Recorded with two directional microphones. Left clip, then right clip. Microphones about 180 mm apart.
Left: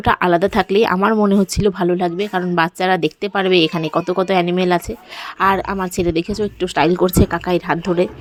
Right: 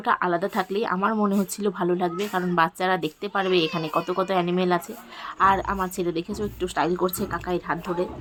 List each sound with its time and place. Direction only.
0.0 s speech: 40° left (ahead or behind)